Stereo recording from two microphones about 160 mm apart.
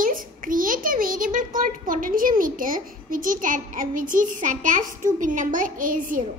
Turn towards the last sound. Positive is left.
turn(degrees=-60)  # may be behind; listen again after turning